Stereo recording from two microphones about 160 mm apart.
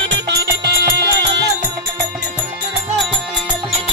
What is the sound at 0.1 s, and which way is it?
Music, 80° right.